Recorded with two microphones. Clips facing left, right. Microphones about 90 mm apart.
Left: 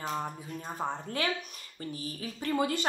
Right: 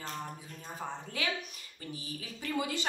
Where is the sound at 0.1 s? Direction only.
40° left (ahead or behind).